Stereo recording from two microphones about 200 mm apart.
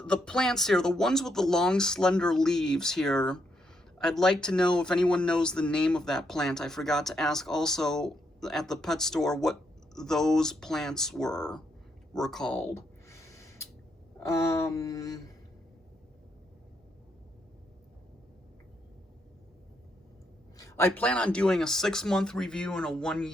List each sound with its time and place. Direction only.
0.0 s speech: 5° left (ahead or behind)
12.1 s a sound: centre (ahead or behind)
20.6 s speech: 15° left (ahead or behind)